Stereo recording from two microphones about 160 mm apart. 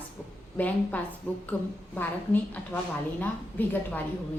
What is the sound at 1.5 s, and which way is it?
A woman's voice, 20° left (ahead or behind).